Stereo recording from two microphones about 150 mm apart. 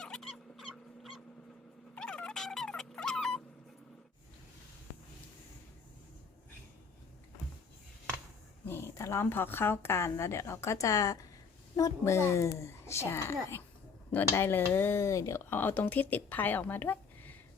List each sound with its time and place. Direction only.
0.0 s dog: 5° left (ahead or behind)
2.0 s a sound: 5° left (ahead or behind)
8.6 s speech: 15° left (ahead or behind)